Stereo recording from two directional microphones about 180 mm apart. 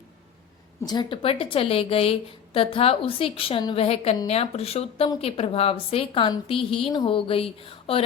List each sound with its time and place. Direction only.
0.8 s speech: 20° left (ahead or behind)